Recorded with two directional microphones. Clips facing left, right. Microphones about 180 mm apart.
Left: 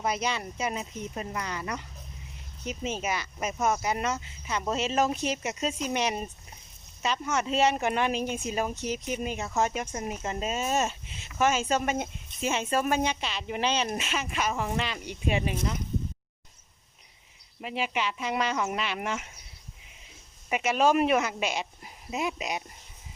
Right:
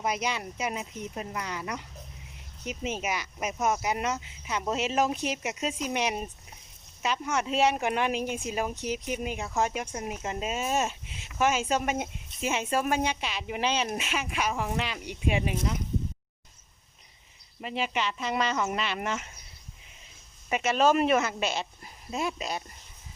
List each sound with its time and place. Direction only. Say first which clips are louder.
0.0 s speech: left 1 dB; 10° right (ahead or behind)
8.7 s speech: even; 15° right (ahead or behind)
17.6 s speech: even; 5° left (ahead or behind)
20.5 s speech: even; 10° left (ahead or behind)